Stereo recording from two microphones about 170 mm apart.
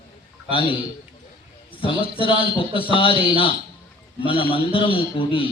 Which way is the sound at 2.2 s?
30° left (ahead or behind).